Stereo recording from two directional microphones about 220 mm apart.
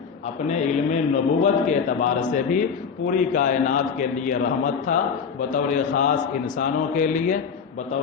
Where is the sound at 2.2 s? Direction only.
35° left (ahead or behind).